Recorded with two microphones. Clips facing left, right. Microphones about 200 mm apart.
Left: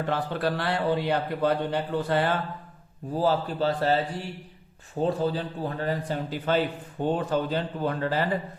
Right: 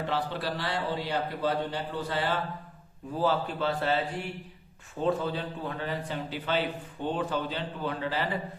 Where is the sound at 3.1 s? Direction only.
35° left (ahead or behind).